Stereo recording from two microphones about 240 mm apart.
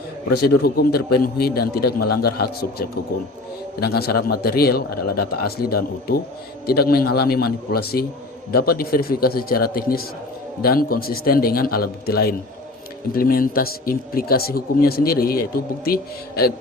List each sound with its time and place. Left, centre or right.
0.6 s speech: left